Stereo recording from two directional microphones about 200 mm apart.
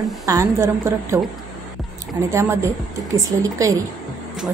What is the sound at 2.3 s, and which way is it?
A woman's voice, 15° right (ahead or behind).